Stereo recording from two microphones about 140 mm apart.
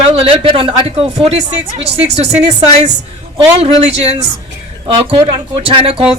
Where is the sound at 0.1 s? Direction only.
40° right (ahead or behind).